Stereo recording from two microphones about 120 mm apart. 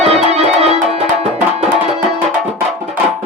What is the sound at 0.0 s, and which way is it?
Music, 60° right (ahead or behind).